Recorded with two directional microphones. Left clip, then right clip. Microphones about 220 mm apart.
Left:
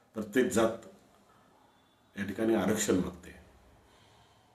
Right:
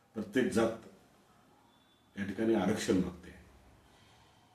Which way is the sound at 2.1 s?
5° left (ahead or behind).